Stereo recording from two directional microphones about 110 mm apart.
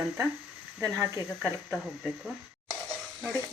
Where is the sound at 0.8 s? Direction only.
25° right (ahead or behind).